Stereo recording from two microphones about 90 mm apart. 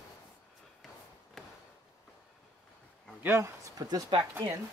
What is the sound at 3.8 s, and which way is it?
Speech, 40° right (ahead or behind).